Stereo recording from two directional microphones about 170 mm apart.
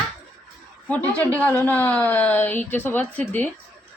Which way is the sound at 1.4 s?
10° left (ahead or behind).